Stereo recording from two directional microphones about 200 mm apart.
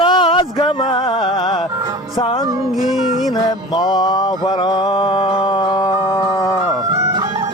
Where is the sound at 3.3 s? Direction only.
20° left (ahead or behind).